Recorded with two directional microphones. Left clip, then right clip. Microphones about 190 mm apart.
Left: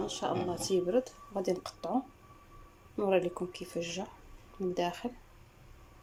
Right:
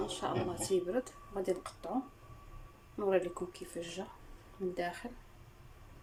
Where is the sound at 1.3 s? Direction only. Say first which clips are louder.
Left 3 dB; 15° left (ahead or behind).